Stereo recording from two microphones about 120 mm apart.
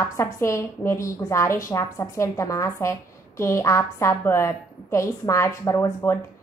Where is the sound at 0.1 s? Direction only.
25° left (ahead or behind).